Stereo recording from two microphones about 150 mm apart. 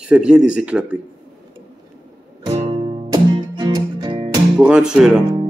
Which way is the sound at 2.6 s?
30° right (ahead or behind).